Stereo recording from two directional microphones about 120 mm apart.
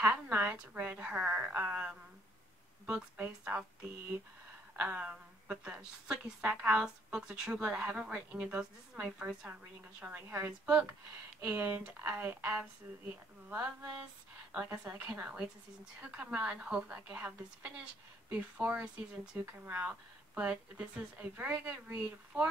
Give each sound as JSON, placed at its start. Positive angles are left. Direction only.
{"t": 0.0, "sound": "a woman's voice", "side_deg": -15}
{"t": 4.7, "sound": "a woman's voice", "side_deg": -10}